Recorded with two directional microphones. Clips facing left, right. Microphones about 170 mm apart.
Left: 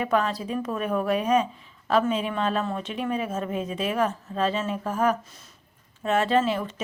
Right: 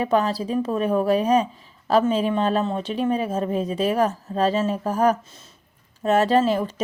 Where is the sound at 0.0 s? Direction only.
30° right (ahead or behind).